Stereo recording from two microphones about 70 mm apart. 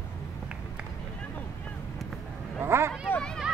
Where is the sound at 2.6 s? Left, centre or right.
Right.